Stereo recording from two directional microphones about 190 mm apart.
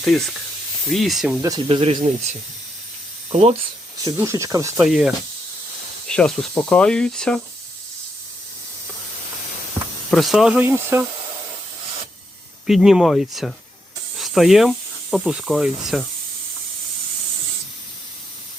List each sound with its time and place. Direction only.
0.0 s speech: centre (ahead or behind)
1.4 s speech: 20° right (ahead or behind)
4.0 s speech: 15° right (ahead or behind)
4.8 s speech: centre (ahead or behind)
10.1 s speech: centre (ahead or behind)
12.6 s speech: centre (ahead or behind)